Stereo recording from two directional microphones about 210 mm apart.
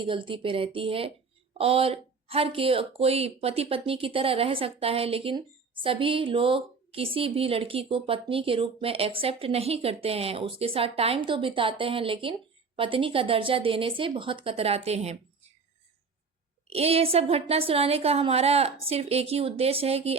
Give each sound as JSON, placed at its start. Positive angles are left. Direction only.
{"t": 0.0, "sound": "speech", "side_deg": -25}
{"t": 16.6, "sound": "speech", "side_deg": -30}